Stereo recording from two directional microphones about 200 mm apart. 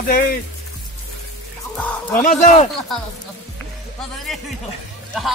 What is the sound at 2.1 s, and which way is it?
Speech, 40° left (ahead or behind).